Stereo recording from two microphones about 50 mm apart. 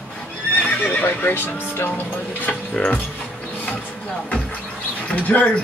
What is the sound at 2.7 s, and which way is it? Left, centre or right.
Speech, left.